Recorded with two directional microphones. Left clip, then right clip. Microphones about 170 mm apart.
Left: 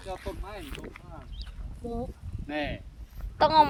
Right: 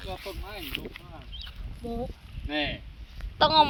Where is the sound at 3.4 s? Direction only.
40° left (ahead or behind).